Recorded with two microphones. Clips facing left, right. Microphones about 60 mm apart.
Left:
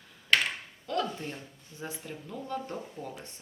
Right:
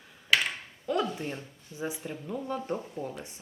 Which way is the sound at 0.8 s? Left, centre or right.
Centre.